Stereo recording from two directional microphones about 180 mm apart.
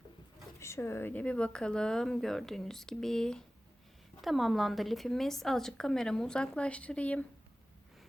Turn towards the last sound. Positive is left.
turn(degrees=5)  # may be behind; listen again after turning